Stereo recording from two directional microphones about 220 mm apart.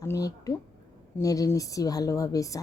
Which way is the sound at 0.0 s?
15° left (ahead or behind).